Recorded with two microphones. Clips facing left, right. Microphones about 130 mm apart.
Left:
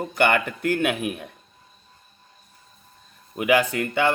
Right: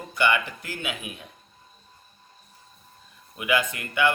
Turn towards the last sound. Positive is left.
turn(degrees=55)  # may be behind; listen again after turning